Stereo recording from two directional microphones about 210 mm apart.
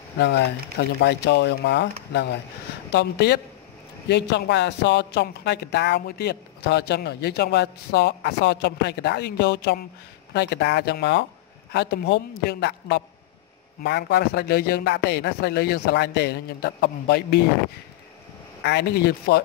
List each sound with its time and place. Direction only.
0.2 s speech: 55° left (ahead or behind)
2.9 s speech: 50° left (ahead or behind)
18.6 s speech: 55° left (ahead or behind)